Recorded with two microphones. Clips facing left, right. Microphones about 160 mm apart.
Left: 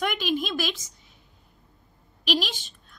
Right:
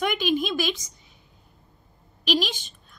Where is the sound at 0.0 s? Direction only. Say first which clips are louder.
Right 3 dB; centre (ahead or behind).